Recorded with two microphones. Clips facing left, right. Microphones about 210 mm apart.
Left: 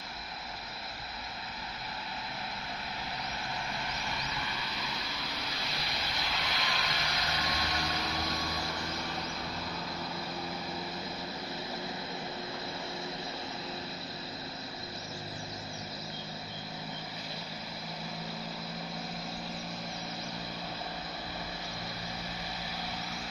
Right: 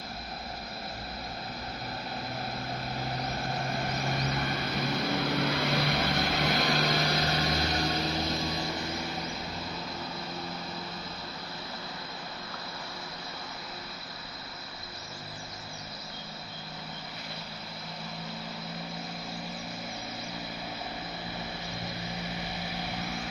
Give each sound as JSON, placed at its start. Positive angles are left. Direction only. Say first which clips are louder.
{"t": 3.0, "sound": "vehicle", "louder": "right 6 dB", "side_deg": -45}